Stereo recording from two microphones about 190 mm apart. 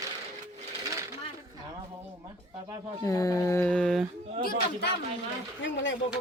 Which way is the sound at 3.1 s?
20° left (ahead or behind).